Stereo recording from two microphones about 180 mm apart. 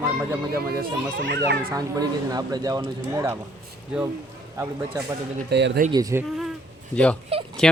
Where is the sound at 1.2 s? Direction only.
60° right (ahead or behind).